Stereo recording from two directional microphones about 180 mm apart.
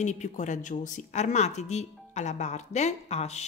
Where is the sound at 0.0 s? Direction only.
40° left (ahead or behind).